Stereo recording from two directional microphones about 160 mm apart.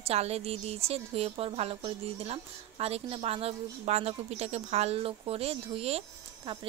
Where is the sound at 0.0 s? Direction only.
40° right (ahead or behind).